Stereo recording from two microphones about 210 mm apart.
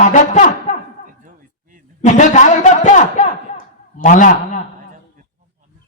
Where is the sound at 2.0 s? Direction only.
35° left (ahead or behind).